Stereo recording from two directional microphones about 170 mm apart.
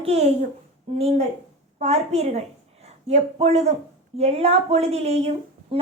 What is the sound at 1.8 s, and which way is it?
Speech, 40° right (ahead or behind).